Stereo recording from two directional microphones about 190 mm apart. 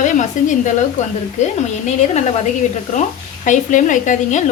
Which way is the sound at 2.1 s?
40° left (ahead or behind).